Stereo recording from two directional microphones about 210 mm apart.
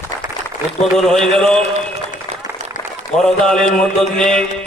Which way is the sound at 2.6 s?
35° right (ahead or behind).